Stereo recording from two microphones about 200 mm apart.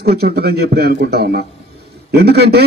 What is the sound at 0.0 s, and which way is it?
A man's voice, 50° right (ahead or behind).